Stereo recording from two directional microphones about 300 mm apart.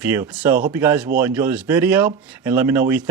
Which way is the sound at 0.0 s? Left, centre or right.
Centre.